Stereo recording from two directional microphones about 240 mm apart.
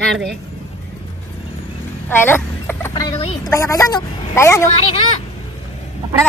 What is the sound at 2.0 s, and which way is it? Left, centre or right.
A woman's voice, centre.